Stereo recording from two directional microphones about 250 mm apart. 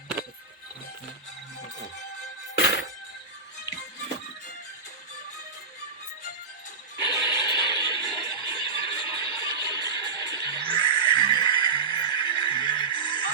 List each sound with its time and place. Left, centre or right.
7.0 s neigh: centre